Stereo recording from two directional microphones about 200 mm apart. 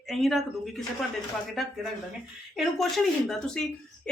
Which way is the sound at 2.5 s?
Centre (ahead or behind).